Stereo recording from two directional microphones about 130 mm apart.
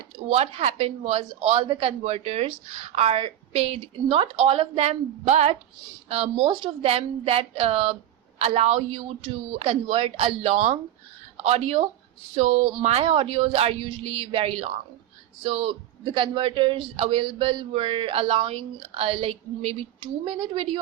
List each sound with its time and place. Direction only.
0.3 s a man's voice: 50° right (ahead or behind)
6.1 s a man's voice: 50° right (ahead or behind)